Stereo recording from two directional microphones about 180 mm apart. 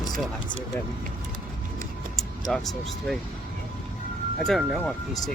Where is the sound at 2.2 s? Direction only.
Centre (ahead or behind).